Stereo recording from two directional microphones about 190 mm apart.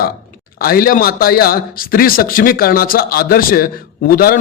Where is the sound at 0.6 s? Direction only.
50° left (ahead or behind).